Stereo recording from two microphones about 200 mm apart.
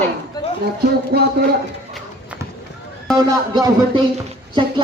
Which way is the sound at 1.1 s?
50° right (ahead or behind).